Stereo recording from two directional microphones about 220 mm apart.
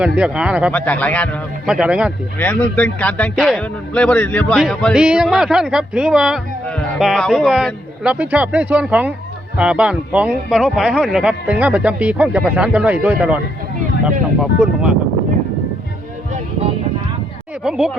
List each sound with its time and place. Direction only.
0.0 s a man's voice: 5° right (ahead or behind)
0.7 s a man's voice: 5° left (ahead or behind)
2.4 s a man's voice: 5° left (ahead or behind)
14.6 s a man's voice: 5° right (ahead or behind)
17.6 s a man's voice: 5° right (ahead or behind)